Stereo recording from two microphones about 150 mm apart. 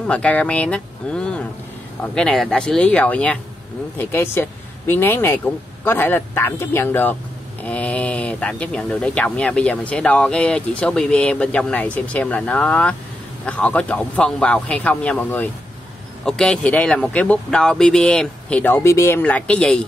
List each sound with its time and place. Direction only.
0.0 s speech: 10° left (ahead or behind)